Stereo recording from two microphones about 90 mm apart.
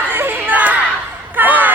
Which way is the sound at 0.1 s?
25° right (ahead or behind).